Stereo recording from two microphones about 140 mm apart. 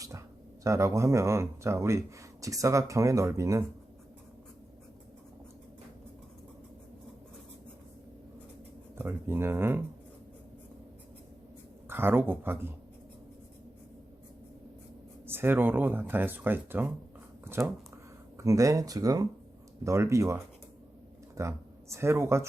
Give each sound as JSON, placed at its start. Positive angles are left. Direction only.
{"t": 0.6, "sound": "speech", "side_deg": -20}
{"t": 9.0, "sound": "speech", "side_deg": -15}
{"t": 11.9, "sound": "speech", "side_deg": -15}
{"t": 15.3, "sound": "speech", "side_deg": -15}
{"t": 17.4, "sound": "a sound", "side_deg": -20}
{"t": 19.8, "sound": "speech", "side_deg": -20}